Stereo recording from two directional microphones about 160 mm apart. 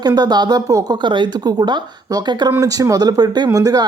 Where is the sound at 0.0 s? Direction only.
25° right (ahead or behind).